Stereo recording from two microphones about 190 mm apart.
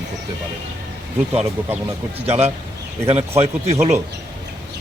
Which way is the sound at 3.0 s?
15° right (ahead or behind).